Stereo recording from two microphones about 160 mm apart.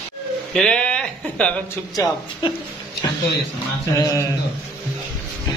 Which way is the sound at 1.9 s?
25° left (ahead or behind).